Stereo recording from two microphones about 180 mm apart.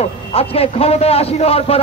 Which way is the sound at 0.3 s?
35° left (ahead or behind).